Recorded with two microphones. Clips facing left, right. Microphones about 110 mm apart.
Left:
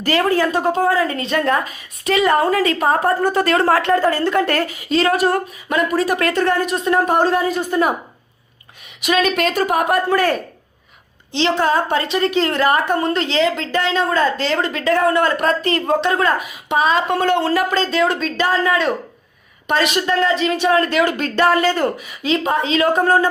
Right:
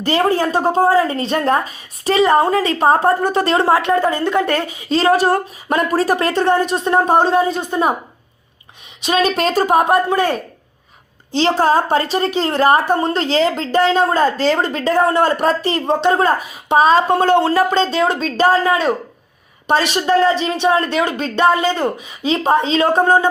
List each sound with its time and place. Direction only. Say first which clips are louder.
0.0 s a woman's voice: right 1 dB; 30° right (ahead or behind)
9.0 s a woman's voice: right 1 dB; 30° right (ahead or behind)
11.3 s a woman's voice: right 3 dB; 40° right (ahead or behind); by 21.8 s 15° right (ahead or behind)
22.2 s a woman's voice: right 3 dB; 30° right (ahead or behind)